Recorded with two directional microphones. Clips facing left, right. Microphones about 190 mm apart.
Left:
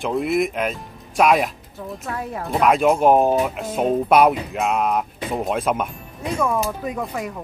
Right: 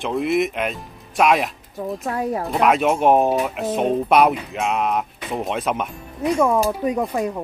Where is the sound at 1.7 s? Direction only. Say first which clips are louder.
Right 8 dB; 40° right (ahead or behind).